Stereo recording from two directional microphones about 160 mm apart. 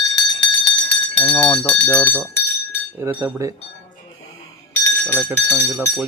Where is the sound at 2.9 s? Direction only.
15° right (ahead or behind).